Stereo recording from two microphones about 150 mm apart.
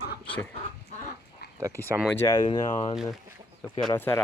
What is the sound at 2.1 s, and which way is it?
Speech, 20° left (ahead or behind).